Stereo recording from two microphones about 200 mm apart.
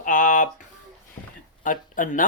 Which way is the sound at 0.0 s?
40° left (ahead or behind).